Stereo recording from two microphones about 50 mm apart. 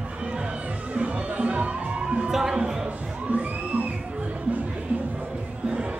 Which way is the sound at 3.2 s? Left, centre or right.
Right.